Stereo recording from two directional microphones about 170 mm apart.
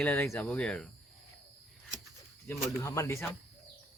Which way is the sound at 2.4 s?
15° left (ahead or behind).